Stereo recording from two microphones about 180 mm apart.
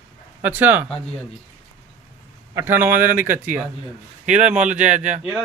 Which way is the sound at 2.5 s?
10° right (ahead or behind).